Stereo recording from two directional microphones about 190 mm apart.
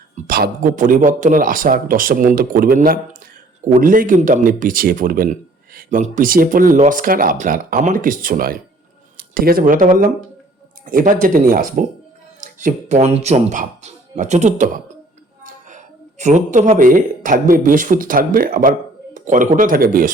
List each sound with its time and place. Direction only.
0.2 s a woman's voice: 50° right (ahead or behind)